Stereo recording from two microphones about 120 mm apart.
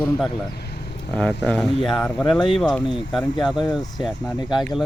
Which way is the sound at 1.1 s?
10° left (ahead or behind).